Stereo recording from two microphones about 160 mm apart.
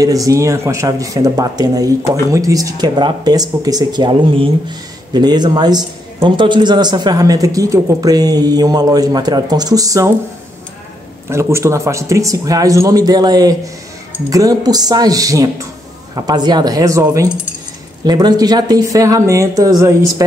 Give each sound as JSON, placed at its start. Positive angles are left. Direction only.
{"t": 0.0, "sound": "speech", "side_deg": -20}
{"t": 11.2, "sound": "speech", "side_deg": -15}